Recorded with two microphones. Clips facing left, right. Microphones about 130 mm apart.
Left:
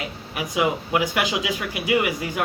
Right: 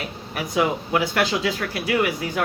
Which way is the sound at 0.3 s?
10° left (ahead or behind).